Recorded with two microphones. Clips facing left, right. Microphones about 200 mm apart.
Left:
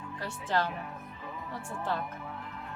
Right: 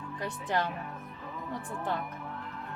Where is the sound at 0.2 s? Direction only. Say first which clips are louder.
Even; 15° right (ahead or behind).